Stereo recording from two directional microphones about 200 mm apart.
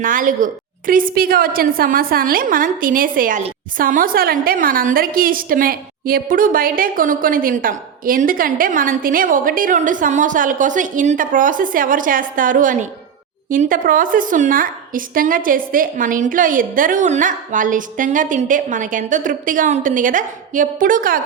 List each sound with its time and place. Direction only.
0.0 s a woman's voice: 40° right (ahead or behind)